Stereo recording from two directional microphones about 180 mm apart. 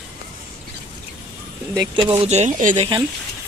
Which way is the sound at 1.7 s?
20° right (ahead or behind).